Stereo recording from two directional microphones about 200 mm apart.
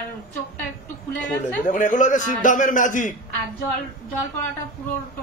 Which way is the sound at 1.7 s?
40° left (ahead or behind).